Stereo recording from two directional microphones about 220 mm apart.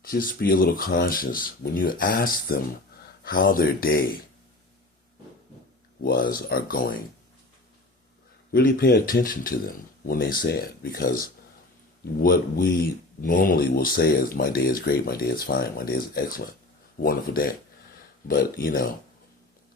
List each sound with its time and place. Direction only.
0.0 s speech: 40° left (ahead or behind)
6.0 s speech: 45° left (ahead or behind)
8.5 s speech: 45° left (ahead or behind)